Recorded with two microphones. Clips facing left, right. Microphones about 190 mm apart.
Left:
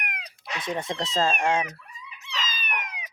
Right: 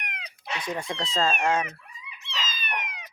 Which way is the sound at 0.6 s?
20° left (ahead or behind).